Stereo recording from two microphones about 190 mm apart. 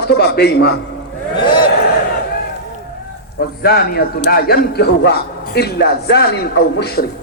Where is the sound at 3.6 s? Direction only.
55° left (ahead or behind).